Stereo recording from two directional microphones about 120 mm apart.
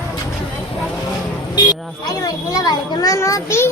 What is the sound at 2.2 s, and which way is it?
A child's voice, 30° left (ahead or behind).